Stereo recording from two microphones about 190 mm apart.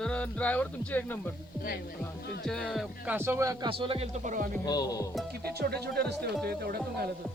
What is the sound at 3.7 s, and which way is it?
Speech, 30° right (ahead or behind).